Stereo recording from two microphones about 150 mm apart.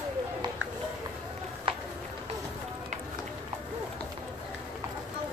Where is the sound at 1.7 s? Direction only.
35° right (ahead or behind).